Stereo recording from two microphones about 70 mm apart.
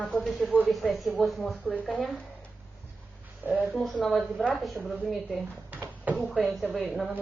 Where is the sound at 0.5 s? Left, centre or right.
Right.